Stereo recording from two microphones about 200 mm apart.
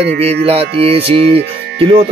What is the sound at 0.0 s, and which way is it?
Speech, 30° right (ahead or behind).